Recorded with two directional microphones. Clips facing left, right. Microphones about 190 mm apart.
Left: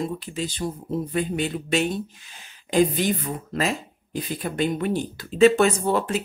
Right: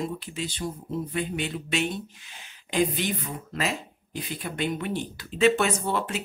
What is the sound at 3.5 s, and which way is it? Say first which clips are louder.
Speech: left 4 dB; 40° left (ahead or behind).